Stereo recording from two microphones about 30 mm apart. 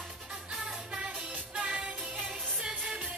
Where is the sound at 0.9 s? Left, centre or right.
Right.